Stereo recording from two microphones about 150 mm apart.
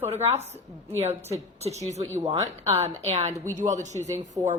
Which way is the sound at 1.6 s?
50° right (ahead or behind).